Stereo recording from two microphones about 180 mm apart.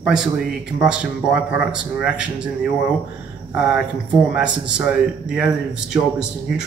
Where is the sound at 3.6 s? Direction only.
5° right (ahead or behind).